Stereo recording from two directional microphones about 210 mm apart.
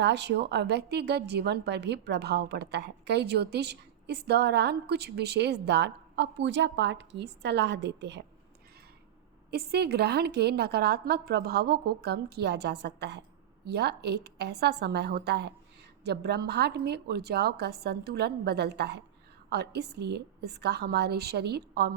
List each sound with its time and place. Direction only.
0.0 s a woman's voice: 55° right (ahead or behind)
9.5 s a woman's voice: 50° right (ahead or behind)